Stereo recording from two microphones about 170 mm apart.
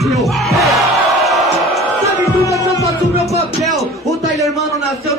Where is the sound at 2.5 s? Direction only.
20° left (ahead or behind).